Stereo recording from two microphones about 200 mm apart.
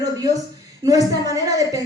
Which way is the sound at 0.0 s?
20° right (ahead or behind).